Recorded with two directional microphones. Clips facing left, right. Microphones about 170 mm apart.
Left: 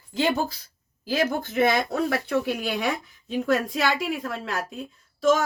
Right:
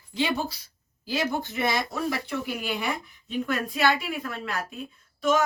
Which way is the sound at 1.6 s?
55° left (ahead or behind).